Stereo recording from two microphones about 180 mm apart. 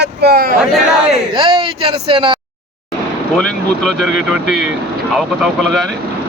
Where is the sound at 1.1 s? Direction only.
30° right (ahead or behind).